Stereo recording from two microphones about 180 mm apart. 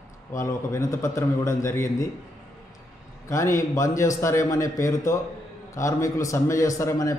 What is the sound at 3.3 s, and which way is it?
Speech, 15° left (ahead or behind).